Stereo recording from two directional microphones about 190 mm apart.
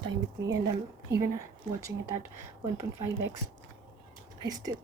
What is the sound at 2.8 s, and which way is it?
Speech, 15° right (ahead or behind).